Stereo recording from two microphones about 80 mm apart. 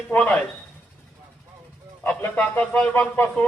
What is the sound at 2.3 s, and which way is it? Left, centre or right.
Speech, centre.